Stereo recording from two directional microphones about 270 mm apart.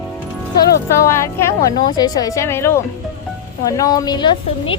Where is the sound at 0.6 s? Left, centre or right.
Centre.